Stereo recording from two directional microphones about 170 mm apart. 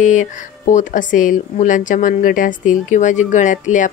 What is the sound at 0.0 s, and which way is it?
Speech, 45° left (ahead or behind).